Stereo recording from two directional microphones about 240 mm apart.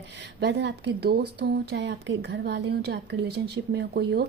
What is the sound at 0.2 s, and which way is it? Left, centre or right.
Speech, right.